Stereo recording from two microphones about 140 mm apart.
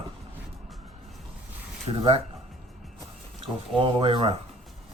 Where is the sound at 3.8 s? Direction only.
40° right (ahead or behind).